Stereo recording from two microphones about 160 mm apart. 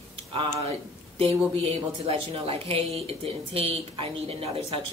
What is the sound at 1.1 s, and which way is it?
Speech, 35° right (ahead or behind).